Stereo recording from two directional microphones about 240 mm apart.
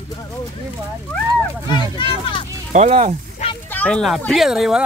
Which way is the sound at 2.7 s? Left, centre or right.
Right.